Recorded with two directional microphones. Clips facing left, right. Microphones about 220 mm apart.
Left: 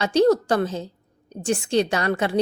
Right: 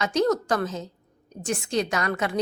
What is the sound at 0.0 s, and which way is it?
A woman's voice, 30° left (ahead or behind).